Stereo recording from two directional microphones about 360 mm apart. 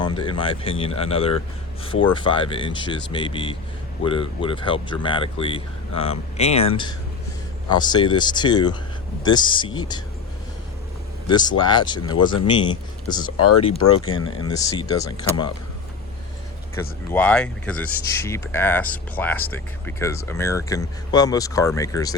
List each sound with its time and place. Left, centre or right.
0.0 s speech: centre
7.7 s speech: centre
11.3 s speech: centre
13.3 s speech: left
14.3 s speech: centre
17.1 s speech: centre